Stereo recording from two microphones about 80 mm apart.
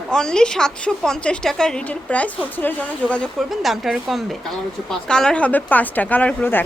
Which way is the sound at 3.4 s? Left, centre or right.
Centre.